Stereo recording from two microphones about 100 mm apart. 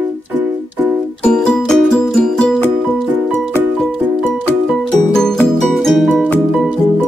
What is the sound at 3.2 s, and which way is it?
Music, 20° right (ahead or behind).